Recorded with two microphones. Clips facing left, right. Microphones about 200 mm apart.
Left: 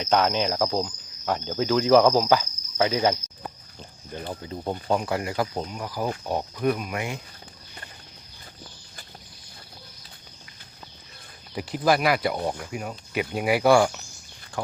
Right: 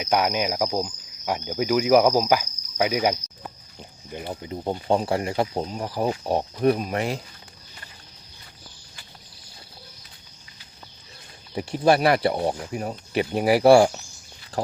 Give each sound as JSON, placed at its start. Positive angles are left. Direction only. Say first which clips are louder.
{"t": 0.0, "sound": "cricket", "louder": "even", "side_deg": -10}
{"t": 3.8, "sound": "speech", "louder": "right 3 dB", "side_deg": -15}
{"t": 4.9, "sound": "speech", "louder": "right 3 dB", "side_deg": -30}
{"t": 11.5, "sound": "speech", "louder": "right 3 dB", "side_deg": -25}